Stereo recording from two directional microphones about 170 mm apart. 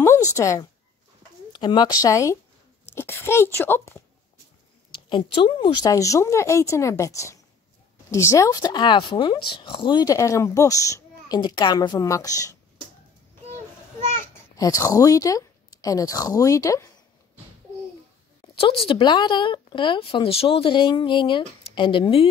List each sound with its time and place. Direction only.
0.0 s a sound: 15° left (ahead or behind)
1.5 s speech: 25° left (ahead or behind)
5.1 s speech: 30° left (ahead or behind)
14.6 s speech: 20° left (ahead or behind)
18.6 s speech: 35° left (ahead or behind)